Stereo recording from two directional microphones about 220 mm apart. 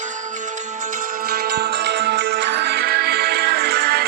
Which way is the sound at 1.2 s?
45° right (ahead or behind).